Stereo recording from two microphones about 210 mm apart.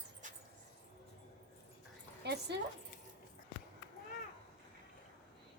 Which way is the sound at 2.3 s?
50° right (ahead or behind).